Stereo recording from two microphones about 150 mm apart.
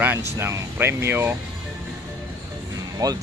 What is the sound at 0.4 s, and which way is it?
Speech, 15° right (ahead or behind).